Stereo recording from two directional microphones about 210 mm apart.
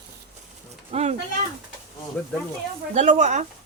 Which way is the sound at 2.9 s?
35° right (ahead or behind).